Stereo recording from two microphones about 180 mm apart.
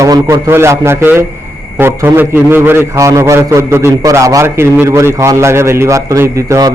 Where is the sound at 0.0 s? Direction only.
15° right (ahead or behind).